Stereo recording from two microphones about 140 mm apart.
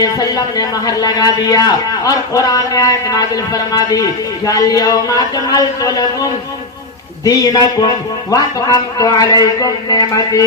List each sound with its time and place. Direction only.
0.0 s speech: 25° left (ahead or behind)
7.3 s speech: 25° left (ahead or behind)